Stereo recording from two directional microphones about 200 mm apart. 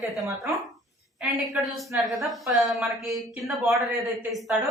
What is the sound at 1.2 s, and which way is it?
A woman's voice, centre (ahead or behind).